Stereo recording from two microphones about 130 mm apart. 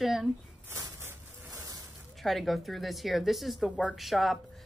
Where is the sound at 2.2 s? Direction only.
Centre (ahead or behind).